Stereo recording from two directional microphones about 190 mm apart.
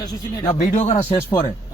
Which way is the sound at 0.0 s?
20° left (ahead or behind).